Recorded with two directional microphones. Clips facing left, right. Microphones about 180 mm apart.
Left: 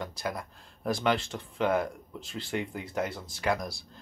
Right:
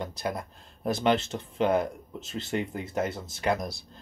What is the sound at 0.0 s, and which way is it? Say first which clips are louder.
Speech: right 2 dB; 20° right (ahead or behind).